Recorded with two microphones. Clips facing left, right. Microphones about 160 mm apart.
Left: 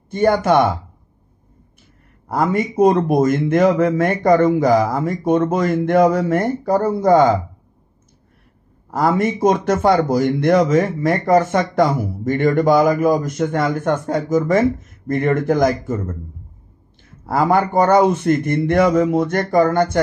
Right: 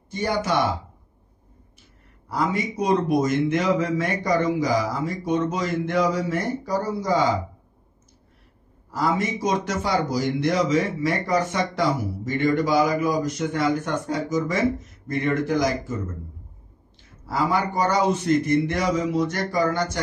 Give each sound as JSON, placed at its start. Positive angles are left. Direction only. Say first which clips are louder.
{"t": 0.1, "sound": "a man's voice", "louder": "left 9 dB", "side_deg": 55}
{"t": 2.2, "sound": "a man's voice", "louder": "left 6 dB", "side_deg": 50}
{"t": 8.9, "sound": "a man's voice", "louder": "left 6 dB", "side_deg": 55}
{"t": 17.3, "sound": "a man's voice", "louder": "left 7 dB", "side_deg": 55}